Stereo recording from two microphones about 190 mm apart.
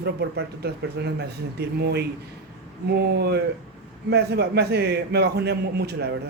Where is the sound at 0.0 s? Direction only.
60° right (ahead or behind).